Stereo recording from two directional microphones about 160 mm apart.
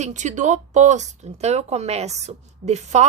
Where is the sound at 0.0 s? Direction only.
50° right (ahead or behind).